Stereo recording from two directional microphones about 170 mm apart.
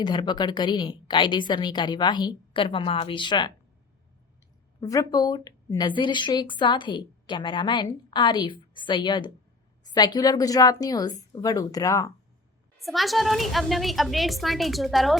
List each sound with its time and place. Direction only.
0.0 s speech: 25° left (ahead or behind)
4.8 s speech: 20° left (ahead or behind)
12.8 s a woman's voice: centre (ahead or behind)